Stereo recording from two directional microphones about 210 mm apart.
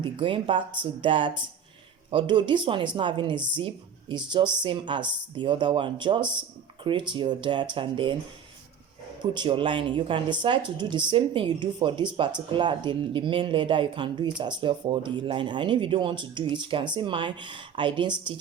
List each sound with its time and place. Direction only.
0.0 s speech: 25° right (ahead or behind)
9.2 s speech: 20° right (ahead or behind)